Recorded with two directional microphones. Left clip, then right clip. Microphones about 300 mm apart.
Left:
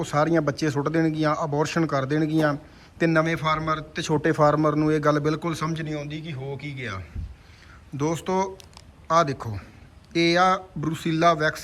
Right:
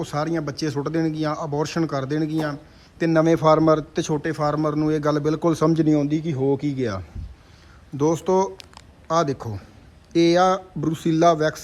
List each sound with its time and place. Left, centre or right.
0.0 s a man's voice: centre